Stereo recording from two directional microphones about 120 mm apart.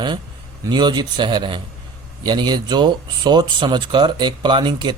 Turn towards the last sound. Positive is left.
turn(degrees=-40)  # may be behind; listen again after turning